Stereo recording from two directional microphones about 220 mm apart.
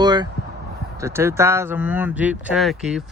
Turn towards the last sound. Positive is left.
turn(degrees=0)  # may be behind; listen again after turning